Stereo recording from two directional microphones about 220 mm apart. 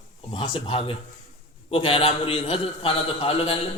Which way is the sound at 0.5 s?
20° left (ahead or behind).